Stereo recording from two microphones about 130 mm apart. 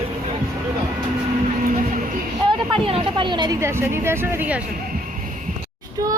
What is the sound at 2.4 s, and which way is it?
Speech, 40° right (ahead or behind).